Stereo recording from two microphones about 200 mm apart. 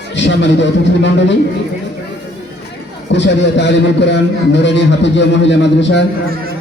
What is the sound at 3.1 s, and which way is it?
A man's voice, 60° left (ahead or behind).